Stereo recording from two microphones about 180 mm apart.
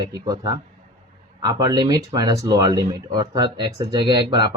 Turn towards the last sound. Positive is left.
turn(degrees=-25)  # may be behind; listen again after turning